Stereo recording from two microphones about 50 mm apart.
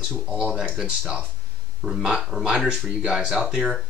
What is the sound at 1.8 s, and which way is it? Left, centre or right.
Speech, centre.